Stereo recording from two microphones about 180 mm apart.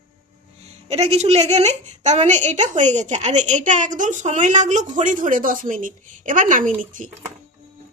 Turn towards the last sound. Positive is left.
turn(degrees=-45)  # may be behind; listen again after turning